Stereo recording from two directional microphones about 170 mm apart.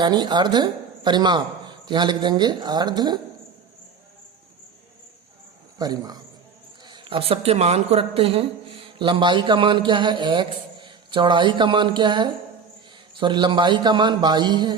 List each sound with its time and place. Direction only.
0.0 s speech: 25° right (ahead or behind)
5.8 s speech: 25° right (ahead or behind)